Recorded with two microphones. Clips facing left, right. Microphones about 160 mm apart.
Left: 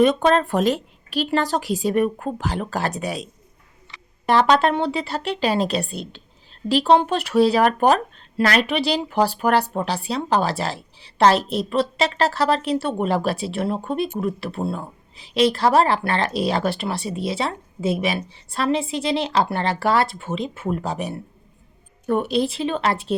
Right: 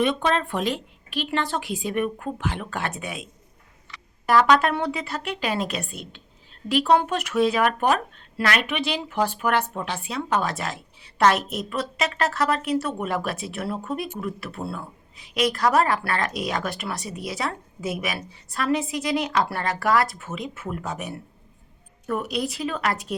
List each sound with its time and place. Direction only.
0.0 s a woman's voice: 40° left (ahead or behind)
4.3 s a woman's voice: 25° left (ahead or behind)